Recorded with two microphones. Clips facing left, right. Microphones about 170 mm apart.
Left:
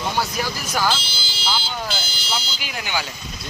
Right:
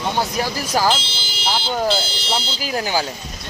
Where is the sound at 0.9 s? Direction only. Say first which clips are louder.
Right 3 dB; 25° right (ahead or behind).